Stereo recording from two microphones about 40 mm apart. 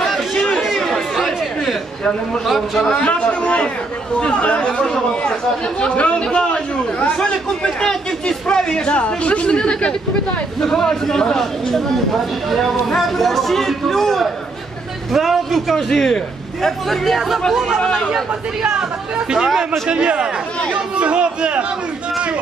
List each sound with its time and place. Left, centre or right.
0.0 s chatter: centre
2.4 s a man's voice: centre
2.9 s speech: left
7.8 s speech: centre
10.6 s a man's voice: centre
12.4 s a man's voice: centre
15.1 s a man's voice: centre
15.7 s a man's voice: centre
17.5 s speech: centre
19.9 s speech: right